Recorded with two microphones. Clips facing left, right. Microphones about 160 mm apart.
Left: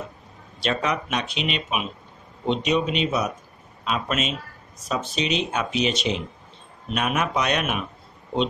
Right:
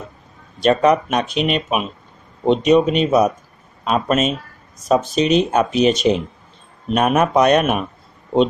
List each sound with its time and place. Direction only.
0.6 s speech: 45° right (ahead or behind)